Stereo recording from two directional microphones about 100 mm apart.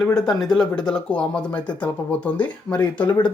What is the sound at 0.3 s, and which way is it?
Speech, 5° left (ahead or behind).